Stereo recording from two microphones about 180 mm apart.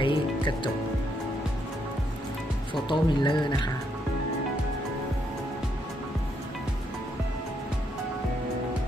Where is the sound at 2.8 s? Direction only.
25° left (ahead or behind).